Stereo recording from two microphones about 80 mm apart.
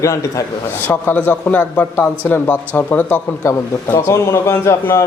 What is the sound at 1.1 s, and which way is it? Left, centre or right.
A man's voice, left.